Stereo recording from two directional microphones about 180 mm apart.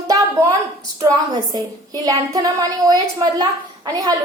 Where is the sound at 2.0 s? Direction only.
20° right (ahead or behind).